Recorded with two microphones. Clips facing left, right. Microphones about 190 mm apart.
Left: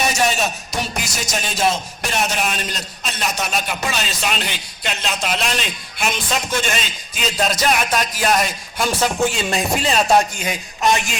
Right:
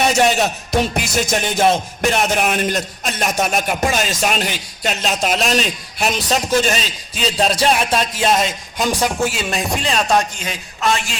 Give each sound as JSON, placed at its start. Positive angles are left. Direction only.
{"t": 0.1, "sound": "music", "side_deg": -60}